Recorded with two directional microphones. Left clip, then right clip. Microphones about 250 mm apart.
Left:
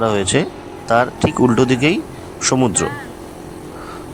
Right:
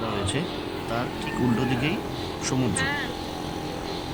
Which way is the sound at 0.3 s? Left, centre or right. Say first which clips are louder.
Left 10 dB; left.